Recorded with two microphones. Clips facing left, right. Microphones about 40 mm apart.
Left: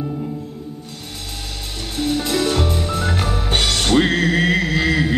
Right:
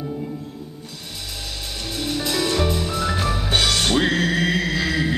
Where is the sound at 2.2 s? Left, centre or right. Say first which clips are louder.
Left 2 dB; left.